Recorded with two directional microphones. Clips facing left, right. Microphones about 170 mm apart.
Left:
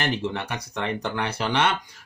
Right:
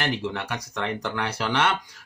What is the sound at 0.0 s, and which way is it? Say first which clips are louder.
Speech: left 1 dB; 20° left (ahead or behind).